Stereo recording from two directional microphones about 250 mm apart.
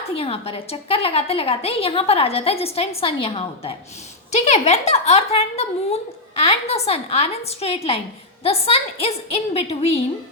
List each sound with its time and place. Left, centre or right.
0.1 s a woman's voice: left